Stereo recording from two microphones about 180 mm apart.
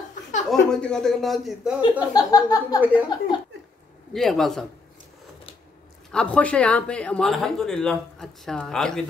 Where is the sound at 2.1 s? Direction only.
20° left (ahead or behind).